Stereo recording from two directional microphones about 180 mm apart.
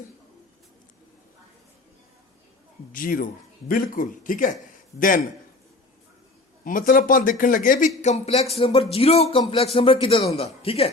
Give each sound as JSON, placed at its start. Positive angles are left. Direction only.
{"t": 2.9, "sound": "speech", "side_deg": 50}
{"t": 6.7, "sound": "speech", "side_deg": 50}